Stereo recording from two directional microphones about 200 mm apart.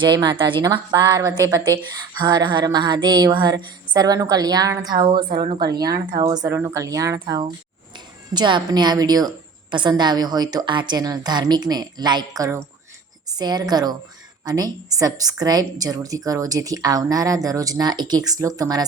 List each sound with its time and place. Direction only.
0.0 s a woman's voice: 20° right (ahead or behind)